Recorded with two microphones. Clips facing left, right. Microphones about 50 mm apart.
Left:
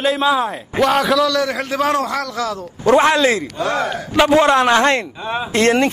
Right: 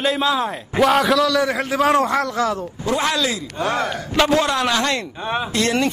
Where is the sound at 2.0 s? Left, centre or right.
Right.